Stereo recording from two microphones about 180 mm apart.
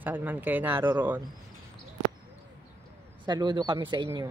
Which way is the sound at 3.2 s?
25° right (ahead or behind).